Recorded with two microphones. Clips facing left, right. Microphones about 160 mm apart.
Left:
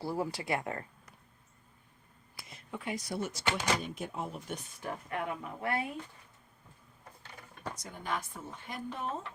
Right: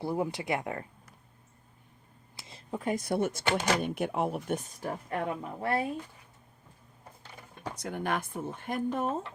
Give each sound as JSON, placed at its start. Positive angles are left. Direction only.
{"t": 0.0, "sound": "speech", "side_deg": -20}
{"t": 2.3, "sound": "speech", "side_deg": -25}
{"t": 7.8, "sound": "speech", "side_deg": -65}